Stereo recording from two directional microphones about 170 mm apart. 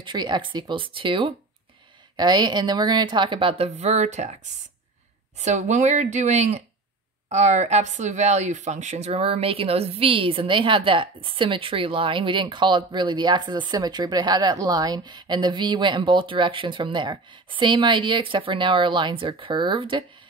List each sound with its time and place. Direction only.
0.0 s speech: 25° right (ahead or behind)